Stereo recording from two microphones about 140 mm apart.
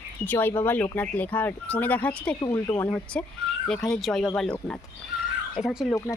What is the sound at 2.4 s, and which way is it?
Speech, 25° left (ahead or behind).